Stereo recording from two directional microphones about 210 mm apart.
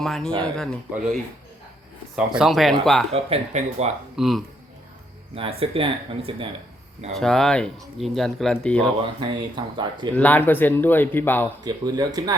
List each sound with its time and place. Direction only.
0.0 s speech: centre (ahead or behind)
2.1 s speech: 5° right (ahead or behind)
3.1 s speech: 30° right (ahead or behind)
4.2 s speech: centre (ahead or behind)
5.3 s speech: 30° right (ahead or behind)
7.2 s speech: centre (ahead or behind)
9.2 s speech: 20° right (ahead or behind)
10.2 s speech: 10° left (ahead or behind)
11.6 s speech: 20° right (ahead or behind)